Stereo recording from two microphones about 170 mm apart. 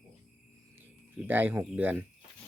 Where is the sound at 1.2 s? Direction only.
10° right (ahead or behind).